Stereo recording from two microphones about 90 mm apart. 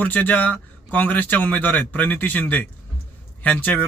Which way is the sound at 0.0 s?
15° left (ahead or behind).